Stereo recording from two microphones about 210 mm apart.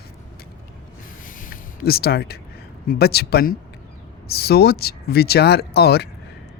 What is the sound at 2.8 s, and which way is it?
Speech, 50° left (ahead or behind).